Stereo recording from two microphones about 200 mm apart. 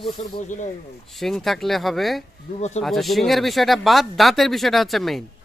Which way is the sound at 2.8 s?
Centre (ahead or behind).